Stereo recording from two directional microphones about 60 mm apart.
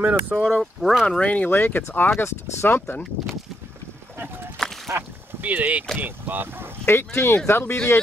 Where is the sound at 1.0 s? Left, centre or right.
Centre; by 3.0 s left.